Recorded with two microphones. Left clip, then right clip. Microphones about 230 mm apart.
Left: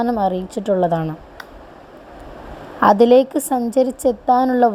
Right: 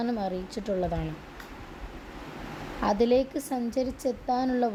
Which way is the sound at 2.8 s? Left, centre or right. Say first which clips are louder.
Left 13 dB; left.